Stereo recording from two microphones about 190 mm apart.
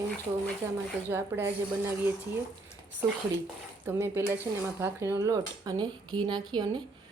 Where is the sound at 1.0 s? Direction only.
10° right (ahead or behind).